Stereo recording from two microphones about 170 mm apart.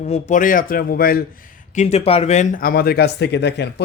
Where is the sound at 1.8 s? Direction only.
40° left (ahead or behind).